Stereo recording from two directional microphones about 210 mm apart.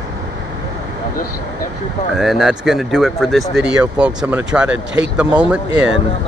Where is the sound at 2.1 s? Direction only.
Centre (ahead or behind).